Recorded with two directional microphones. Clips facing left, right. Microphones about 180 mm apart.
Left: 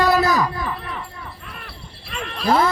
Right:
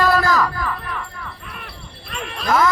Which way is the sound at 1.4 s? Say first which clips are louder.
Right 1 dB; centre (ahead or behind).